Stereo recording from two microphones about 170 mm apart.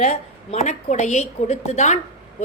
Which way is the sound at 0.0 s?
40° left (ahead or behind).